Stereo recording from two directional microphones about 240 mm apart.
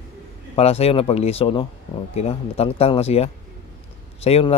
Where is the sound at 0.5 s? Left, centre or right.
Left.